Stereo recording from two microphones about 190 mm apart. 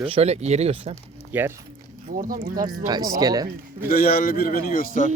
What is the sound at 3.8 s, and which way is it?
A man's voice, 55° left (ahead or behind).